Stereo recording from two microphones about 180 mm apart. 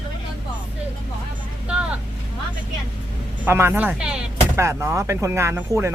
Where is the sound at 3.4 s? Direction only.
15° right (ahead or behind).